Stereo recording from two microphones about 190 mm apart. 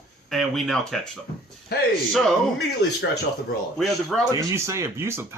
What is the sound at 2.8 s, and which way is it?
Speech, 60° left (ahead or behind).